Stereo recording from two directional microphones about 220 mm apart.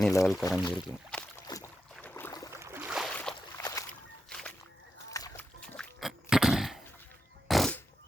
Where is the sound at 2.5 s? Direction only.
10° right (ahead or behind); by 3.8 s 10° left (ahead or behind).